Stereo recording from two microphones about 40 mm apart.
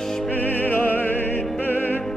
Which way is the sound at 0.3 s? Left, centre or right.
Left.